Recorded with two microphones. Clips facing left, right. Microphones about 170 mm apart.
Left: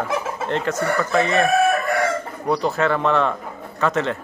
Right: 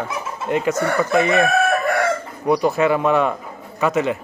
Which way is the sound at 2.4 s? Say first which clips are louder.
Right 4 dB; 10° right (ahead or behind).